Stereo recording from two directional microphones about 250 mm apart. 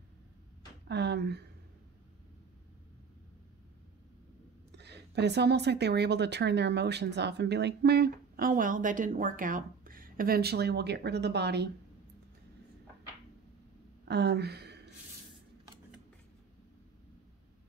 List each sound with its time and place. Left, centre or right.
0.8 s speech: right
4.7 s speech: right
14.0 s speech: right